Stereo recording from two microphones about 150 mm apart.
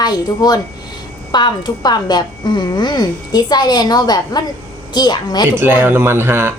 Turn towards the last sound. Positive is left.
turn(degrees=-15)  # may be behind; listen again after turning